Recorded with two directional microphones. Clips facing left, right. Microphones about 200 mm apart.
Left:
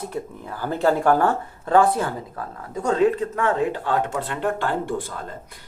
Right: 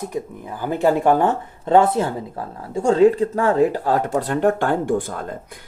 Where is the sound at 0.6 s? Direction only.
15° right (ahead or behind).